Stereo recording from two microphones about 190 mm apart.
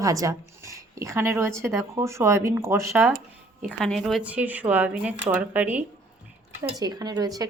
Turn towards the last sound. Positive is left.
turn(degrees=-20)  # may be behind; listen again after turning